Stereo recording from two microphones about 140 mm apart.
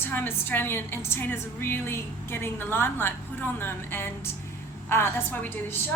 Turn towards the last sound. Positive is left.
turn(degrees=15)  # may be behind; listen again after turning